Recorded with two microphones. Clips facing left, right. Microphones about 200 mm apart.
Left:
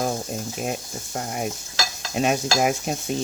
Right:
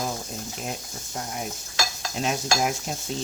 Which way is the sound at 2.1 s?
60° left (ahead or behind).